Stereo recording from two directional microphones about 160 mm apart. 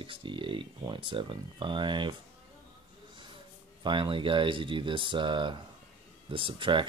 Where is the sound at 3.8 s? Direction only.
30° right (ahead or behind).